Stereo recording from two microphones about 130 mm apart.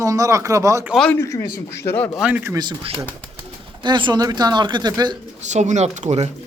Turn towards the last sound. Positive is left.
turn(degrees=-60)  # may be behind; listen again after turning